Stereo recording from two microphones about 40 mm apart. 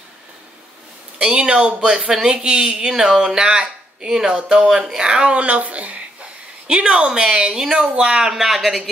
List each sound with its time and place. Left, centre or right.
1.2 s speech: right
6.7 s speech: right
8.3 s speech: centre